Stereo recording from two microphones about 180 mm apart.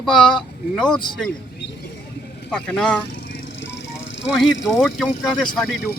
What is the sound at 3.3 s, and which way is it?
Vehicle, 75° left (ahead or behind).